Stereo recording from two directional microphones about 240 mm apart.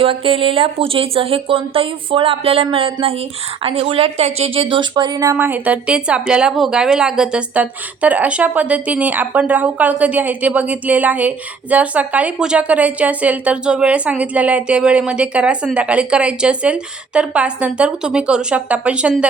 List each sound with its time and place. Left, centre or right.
0.0 s speech: right; by 19.3 s centre